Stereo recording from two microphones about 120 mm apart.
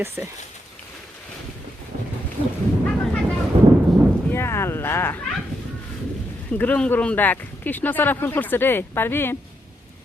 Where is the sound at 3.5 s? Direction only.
45° right (ahead or behind).